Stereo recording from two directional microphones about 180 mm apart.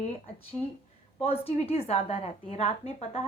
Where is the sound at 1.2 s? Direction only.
35° left (ahead or behind).